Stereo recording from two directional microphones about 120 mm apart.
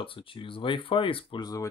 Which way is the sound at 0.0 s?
45° left (ahead or behind).